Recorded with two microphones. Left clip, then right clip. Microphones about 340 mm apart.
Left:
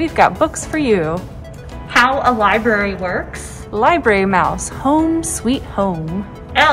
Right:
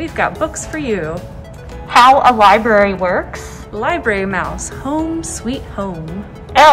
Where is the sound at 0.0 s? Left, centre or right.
Centre.